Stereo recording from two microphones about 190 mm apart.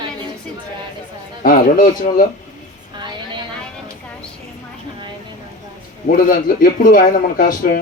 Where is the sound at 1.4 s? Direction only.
45° left (ahead or behind).